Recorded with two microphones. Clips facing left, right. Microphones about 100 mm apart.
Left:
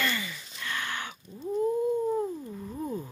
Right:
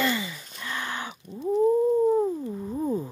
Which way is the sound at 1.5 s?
25° right (ahead or behind).